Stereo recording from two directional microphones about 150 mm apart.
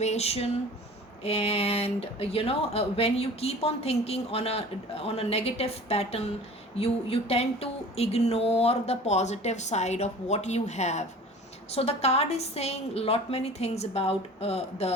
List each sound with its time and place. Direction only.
0.0 s speech: 45° left (ahead or behind)